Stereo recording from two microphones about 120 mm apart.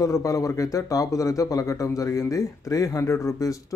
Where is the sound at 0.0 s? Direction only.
25° left (ahead or behind).